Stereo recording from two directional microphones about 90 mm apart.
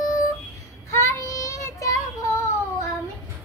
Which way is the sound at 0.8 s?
30° left (ahead or behind).